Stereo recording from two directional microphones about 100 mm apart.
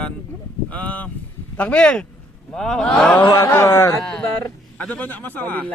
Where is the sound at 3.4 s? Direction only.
25° left (ahead or behind).